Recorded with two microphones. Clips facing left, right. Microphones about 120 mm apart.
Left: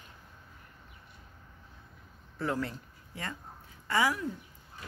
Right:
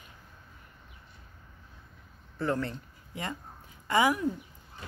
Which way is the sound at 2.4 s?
5° left (ahead or behind).